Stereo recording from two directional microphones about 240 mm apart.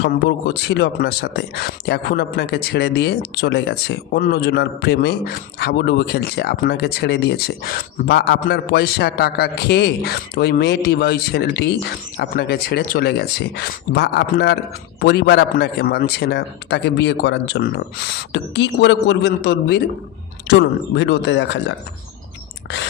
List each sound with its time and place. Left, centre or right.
0.0 s speech: left